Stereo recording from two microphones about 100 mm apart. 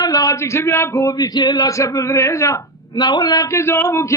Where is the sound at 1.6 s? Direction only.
35° left (ahead or behind).